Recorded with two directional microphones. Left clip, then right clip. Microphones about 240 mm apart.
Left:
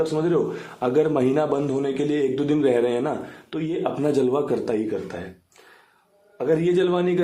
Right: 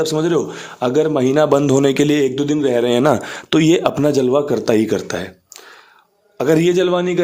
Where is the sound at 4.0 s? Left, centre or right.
Right.